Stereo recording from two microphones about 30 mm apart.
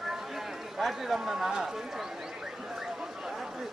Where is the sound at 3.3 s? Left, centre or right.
Centre.